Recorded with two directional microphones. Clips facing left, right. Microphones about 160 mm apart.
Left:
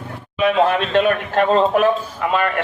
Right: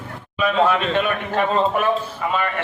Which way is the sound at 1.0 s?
55° left (ahead or behind).